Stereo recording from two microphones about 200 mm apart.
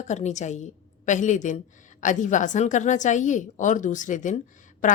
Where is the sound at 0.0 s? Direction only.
35° left (ahead or behind).